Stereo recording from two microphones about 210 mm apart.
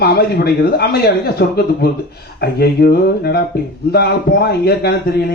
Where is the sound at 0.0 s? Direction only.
50° left (ahead or behind).